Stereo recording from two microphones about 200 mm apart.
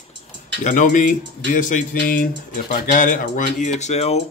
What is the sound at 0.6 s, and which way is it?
Speech, 40° left (ahead or behind).